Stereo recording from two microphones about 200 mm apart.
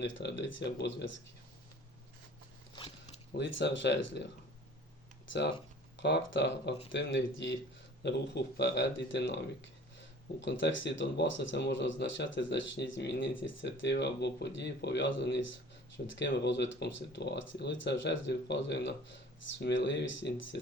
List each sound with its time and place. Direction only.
0.0 s speech: 60° left (ahead or behind)
3.3 s speech: 60° left (ahead or behind)
6.0 s speech: 60° left (ahead or behind)